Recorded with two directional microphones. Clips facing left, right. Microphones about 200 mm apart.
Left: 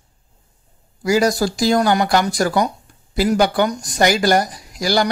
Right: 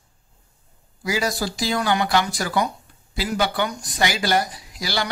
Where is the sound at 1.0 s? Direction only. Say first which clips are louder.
Left 8 dB; 45° left (ahead or behind).